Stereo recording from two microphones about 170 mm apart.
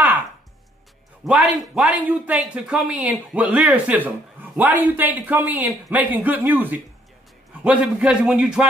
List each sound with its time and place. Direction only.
1.2 s a man's voice: 5° right (ahead or behind)